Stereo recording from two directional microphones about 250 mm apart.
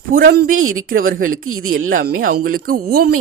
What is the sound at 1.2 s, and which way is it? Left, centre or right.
Speech, right.